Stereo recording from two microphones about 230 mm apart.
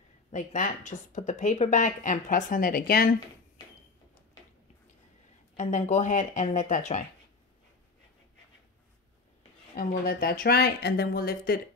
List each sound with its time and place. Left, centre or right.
0.3 s speech: left
5.6 s speech: left
9.8 s speech: left